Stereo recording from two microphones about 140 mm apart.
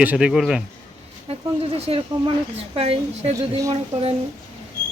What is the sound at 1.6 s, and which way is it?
A woman's voice, 45° right (ahead or behind).